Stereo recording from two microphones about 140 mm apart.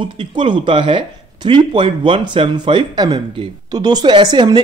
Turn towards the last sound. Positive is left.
turn(degrees=-30)  # may be behind; listen again after turning